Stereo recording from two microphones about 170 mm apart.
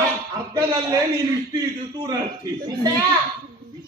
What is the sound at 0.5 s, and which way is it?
A man's voice, 25° right (ahead or behind).